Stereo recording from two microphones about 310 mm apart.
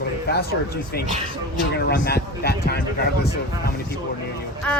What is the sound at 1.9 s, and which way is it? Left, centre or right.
Speech, left.